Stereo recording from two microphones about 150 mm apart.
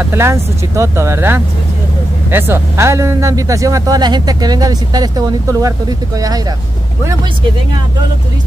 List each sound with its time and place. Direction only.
0.0 s a man's voice: 15° right (ahead or behind)